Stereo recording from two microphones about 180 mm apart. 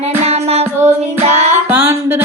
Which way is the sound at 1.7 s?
10° right (ahead or behind).